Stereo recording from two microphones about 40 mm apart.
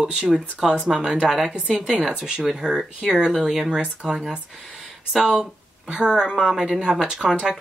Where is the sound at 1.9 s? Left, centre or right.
Right.